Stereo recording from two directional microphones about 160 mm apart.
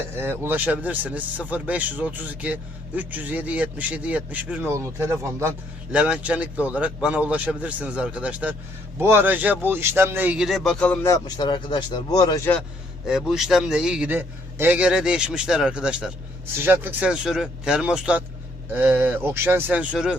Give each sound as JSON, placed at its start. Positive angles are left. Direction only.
{"t": 0.2, "sound": "speech", "side_deg": -15}
{"t": 11.1, "sound": "speech", "side_deg": 25}
{"t": 13.1, "sound": "a man's voice", "side_deg": -5}